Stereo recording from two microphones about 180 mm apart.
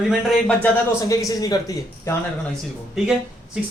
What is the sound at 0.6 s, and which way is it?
Speech, 20° left (ahead or behind).